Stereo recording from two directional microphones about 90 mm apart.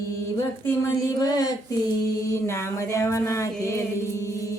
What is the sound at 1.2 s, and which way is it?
Child singing, 45° left (ahead or behind).